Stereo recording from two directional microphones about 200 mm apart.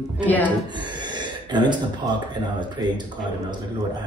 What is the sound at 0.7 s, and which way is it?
Gasp, 20° right (ahead or behind).